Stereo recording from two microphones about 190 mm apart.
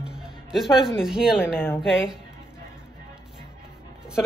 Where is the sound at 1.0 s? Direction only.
5° right (ahead or behind).